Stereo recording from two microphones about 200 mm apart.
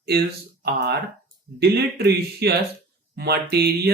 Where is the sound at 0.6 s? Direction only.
55° right (ahead or behind).